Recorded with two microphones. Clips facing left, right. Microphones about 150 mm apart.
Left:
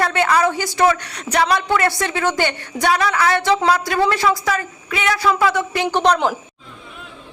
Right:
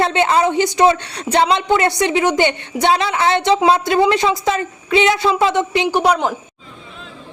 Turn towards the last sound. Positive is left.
turn(degrees=-10)  # may be behind; listen again after turning